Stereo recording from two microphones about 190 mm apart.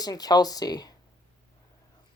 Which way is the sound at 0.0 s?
20° left (ahead or behind).